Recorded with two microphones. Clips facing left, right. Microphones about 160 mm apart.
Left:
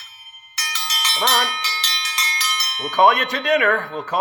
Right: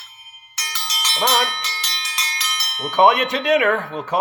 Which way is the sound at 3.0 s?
20° right (ahead or behind).